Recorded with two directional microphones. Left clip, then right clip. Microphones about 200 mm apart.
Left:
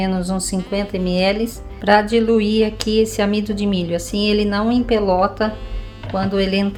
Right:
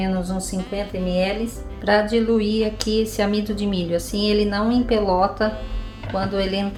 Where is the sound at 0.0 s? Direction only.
45° left (ahead or behind).